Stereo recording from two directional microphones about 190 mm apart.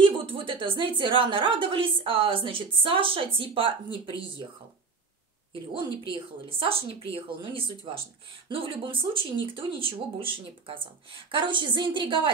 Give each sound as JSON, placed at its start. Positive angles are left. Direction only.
{"t": 0.0, "sound": "speech", "side_deg": -25}
{"t": 6.6, "sound": "speech", "side_deg": -30}